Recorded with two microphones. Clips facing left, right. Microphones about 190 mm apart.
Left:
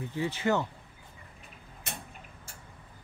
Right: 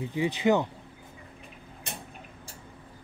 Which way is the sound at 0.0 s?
15° right (ahead or behind).